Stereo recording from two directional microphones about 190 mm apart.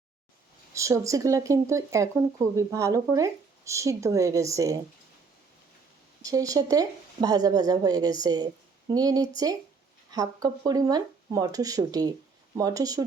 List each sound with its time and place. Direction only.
0.7 s speech: 15° right (ahead or behind)
6.2 s speech: 20° right (ahead or behind)